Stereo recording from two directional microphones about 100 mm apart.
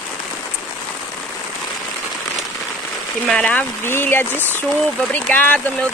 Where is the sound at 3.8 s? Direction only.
20° left (ahead or behind).